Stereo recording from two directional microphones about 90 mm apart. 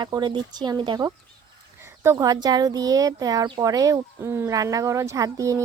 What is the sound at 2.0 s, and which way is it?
Speech, 35° right (ahead or behind).